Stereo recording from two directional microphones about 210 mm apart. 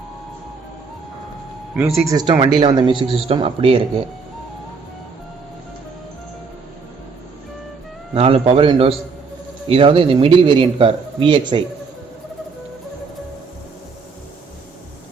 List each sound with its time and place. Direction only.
1.7 s speech: 5° right (ahead or behind)
2.6 s speech: 25° right (ahead or behind)
8.1 s speech: 30° right (ahead or behind)